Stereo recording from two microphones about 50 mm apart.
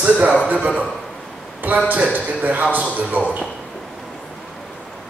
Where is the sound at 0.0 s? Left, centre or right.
Right.